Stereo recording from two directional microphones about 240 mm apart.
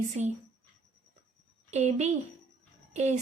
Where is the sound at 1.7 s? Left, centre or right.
Right.